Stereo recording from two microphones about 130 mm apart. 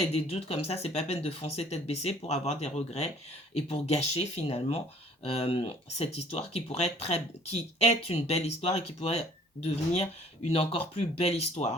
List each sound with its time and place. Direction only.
0.0 s speech: 50° left (ahead or behind)